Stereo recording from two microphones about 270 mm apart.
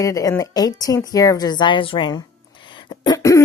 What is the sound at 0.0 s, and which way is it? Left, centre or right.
Speech, centre.